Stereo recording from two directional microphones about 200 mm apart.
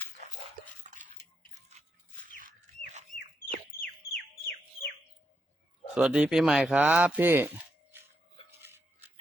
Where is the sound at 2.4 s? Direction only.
40° right (ahead or behind).